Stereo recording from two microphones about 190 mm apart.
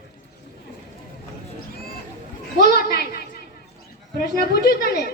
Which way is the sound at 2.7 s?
55° left (ahead or behind).